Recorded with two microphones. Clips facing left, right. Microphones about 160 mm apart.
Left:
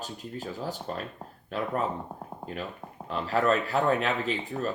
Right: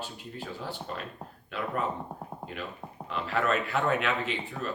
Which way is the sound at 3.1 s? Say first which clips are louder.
Left 3 dB; 40° left (ahead or behind).